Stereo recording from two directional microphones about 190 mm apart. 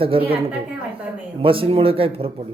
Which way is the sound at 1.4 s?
30° right (ahead or behind).